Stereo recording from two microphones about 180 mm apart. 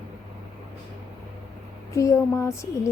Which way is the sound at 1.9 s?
15° left (ahead or behind).